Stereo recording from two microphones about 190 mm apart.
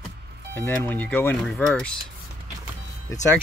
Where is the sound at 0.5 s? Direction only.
10° left (ahead or behind).